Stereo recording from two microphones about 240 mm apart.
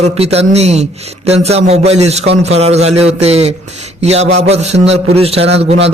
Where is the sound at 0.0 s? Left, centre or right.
Right.